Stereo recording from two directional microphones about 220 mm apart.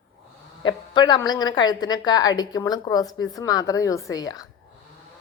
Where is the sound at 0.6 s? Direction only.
20° left (ahead or behind).